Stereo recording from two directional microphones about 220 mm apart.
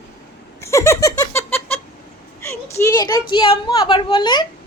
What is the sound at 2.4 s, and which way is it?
A woman's voice, 10° left (ahead or behind).